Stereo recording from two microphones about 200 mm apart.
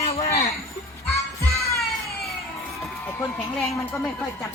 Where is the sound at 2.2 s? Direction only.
Centre (ahead or behind).